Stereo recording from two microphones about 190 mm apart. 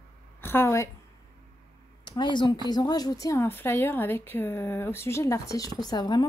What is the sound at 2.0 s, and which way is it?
A woman's voice, 25° left (ahead or behind).